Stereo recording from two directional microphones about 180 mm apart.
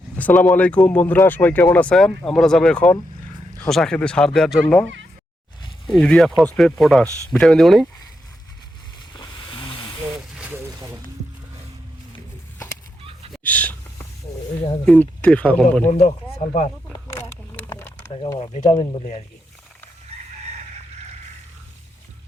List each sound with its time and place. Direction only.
0.2 s speech: 10° left (ahead or behind)
5.9 s speech: 5° left (ahead or behind)
9.1 s a sound: 25° left (ahead or behind)
10.3 s boat: 5° right (ahead or behind)
10.7 s boat: 20° right (ahead or behind)
13.3 s a sound: 10° left (ahead or behind)
14.8 s speech: 5° left (ahead or behind)
15.8 s speech: 40° left (ahead or behind)
17.7 s a sound: 10° left (ahead or behind)
18.3 s speech: 30° left (ahead or behind)